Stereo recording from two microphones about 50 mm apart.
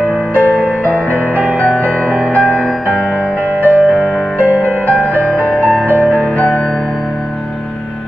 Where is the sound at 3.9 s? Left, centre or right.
Centre.